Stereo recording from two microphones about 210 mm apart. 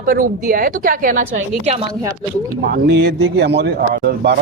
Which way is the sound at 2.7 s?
55° right (ahead or behind).